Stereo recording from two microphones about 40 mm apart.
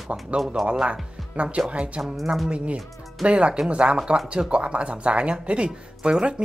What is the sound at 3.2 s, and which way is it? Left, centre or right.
Speech, right.